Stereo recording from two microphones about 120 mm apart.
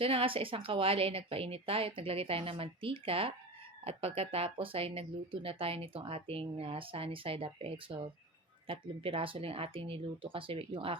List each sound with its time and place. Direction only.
0.0 s speech: 50° right (ahead or behind)